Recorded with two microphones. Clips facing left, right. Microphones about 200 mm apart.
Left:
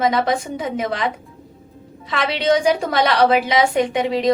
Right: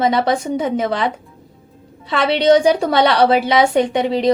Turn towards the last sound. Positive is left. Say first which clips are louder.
# right 2 dB
turn(degrees=-30)  # may be behind; listen again after turning